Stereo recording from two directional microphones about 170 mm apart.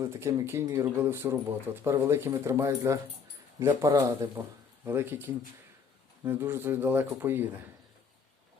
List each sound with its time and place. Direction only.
0.0 s speech: 15° right (ahead or behind)